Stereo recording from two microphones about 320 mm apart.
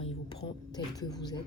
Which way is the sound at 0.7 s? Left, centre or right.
Centre.